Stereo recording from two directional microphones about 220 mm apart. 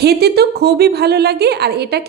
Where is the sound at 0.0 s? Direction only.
45° right (ahead or behind).